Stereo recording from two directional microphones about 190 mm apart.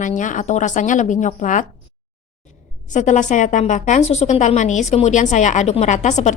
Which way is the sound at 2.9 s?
40° left (ahead or behind).